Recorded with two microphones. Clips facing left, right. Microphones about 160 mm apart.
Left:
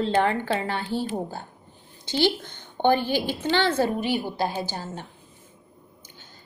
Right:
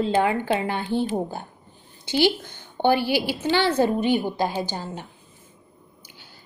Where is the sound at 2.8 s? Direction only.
10° right (ahead or behind).